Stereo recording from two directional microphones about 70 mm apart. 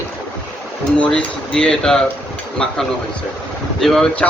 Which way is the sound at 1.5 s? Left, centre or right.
Centre.